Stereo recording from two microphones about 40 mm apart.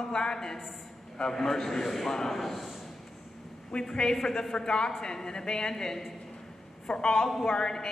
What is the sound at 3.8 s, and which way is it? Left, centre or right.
A woman's voice, centre.